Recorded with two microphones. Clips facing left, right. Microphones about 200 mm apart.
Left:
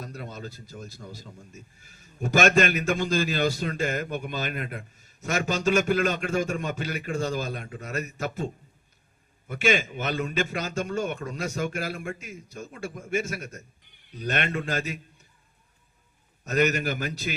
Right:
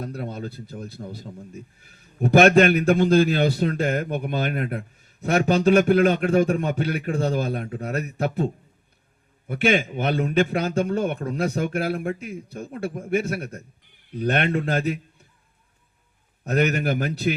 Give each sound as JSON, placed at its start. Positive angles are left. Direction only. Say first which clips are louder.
{"t": 0.0, "sound": "a man's voice", "louder": "right 7 dB", "side_deg": -60}
{"t": 9.5, "sound": "a man's voice", "louder": "right 4 dB", "side_deg": -60}
{"t": 16.4, "sound": "a man's voice", "louder": "right 2 dB", "side_deg": -60}